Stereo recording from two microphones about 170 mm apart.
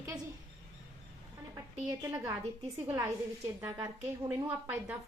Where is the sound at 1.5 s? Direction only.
20° right (ahead or behind).